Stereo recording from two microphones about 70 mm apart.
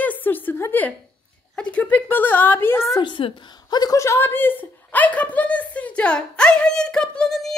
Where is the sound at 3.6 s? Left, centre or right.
Left.